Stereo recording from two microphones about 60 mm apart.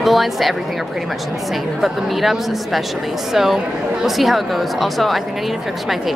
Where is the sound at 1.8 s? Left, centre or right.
Centre.